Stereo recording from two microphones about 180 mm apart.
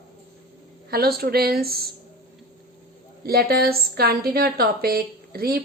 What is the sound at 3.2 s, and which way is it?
A woman's voice, 60° right (ahead or behind).